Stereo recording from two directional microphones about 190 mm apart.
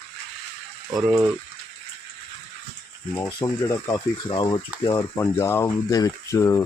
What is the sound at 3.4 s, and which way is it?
Speech, 25° left (ahead or behind).